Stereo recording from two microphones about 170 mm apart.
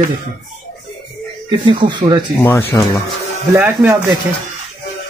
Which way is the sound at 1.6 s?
30° right (ahead or behind).